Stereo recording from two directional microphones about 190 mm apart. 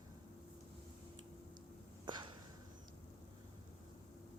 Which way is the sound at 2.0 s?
25° right (ahead or behind).